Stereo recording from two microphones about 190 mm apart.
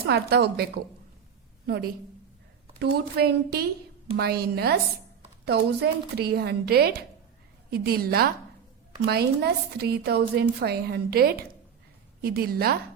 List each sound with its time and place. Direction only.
0.1 s a woman's voice: 60° right (ahead or behind)